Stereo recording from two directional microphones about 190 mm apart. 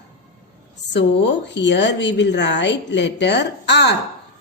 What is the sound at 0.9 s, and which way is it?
A woman's voice, 65° left (ahead or behind).